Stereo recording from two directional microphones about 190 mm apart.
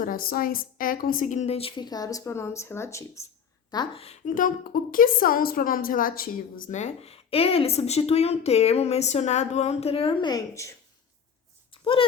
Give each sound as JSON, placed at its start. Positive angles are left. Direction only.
{"t": 0.0, "sound": "a woman's voice", "side_deg": 50}
{"t": 3.7, "sound": "a woman's voice", "side_deg": 25}
{"t": 11.7, "sound": "a sound", "side_deg": 30}